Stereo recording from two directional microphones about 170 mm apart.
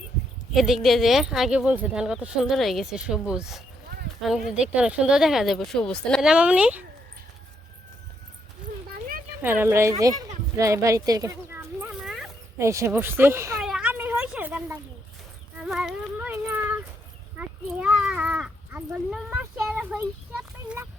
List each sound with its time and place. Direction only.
0.5 s speech: centre (ahead or behind)
9.4 s speech: 10° right (ahead or behind)
10.0 s a sound: 20° right (ahead or behind)
12.0 s dog: centre (ahead or behind)
12.5 s speech: 15° right (ahead or behind)
13.6 s a sound: 5° right (ahead or behind)